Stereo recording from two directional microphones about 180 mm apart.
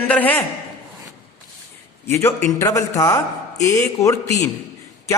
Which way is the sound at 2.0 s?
15° left (ahead or behind).